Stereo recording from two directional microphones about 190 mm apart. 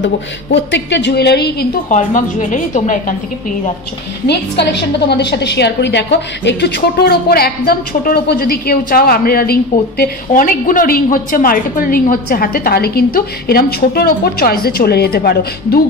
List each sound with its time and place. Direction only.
0.0 s a woman's voice: 70° left (ahead or behind)
1.9 s a woman's voice: 40° left (ahead or behind)
4.3 s a woman's voice: 60° left (ahead or behind)